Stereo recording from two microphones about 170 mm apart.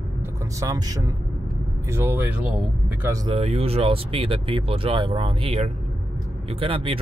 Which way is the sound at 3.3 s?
35° right (ahead or behind).